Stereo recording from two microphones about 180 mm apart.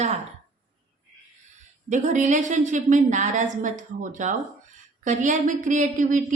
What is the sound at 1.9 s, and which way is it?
A woman's voice, 45° right (ahead or behind).